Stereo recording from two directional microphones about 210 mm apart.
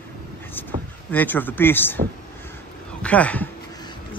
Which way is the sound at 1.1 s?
10° left (ahead or behind).